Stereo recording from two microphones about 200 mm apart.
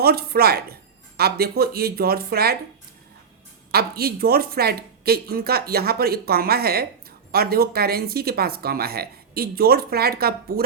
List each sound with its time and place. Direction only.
0.0 s speech: 50° right (ahead or behind)
3.7 s speech: 50° right (ahead or behind)